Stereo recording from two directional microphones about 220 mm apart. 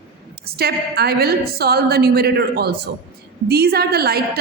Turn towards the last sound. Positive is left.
turn(degrees=-45)  # may be behind; listen again after turning